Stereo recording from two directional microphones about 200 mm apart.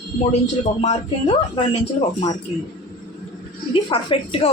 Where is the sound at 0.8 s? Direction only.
30° left (ahead or behind).